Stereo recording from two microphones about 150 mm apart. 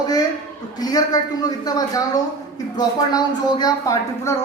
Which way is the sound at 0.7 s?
25° left (ahead or behind).